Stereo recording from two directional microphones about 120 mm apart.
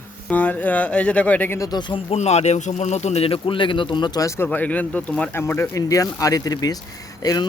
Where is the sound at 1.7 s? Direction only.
40° left (ahead or behind).